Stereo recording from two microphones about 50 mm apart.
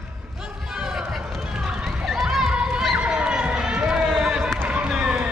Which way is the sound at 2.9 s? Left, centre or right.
Centre.